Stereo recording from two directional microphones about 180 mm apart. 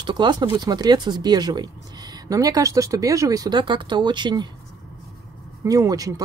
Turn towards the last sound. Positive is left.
turn(degrees=-20)  # may be behind; listen again after turning